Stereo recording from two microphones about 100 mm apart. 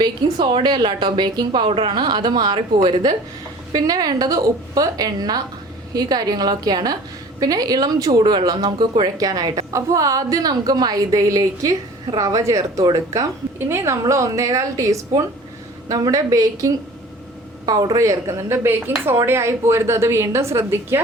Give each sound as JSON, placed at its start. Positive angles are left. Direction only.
{"t": 0.0, "sound": "a woman's voice", "side_deg": -50}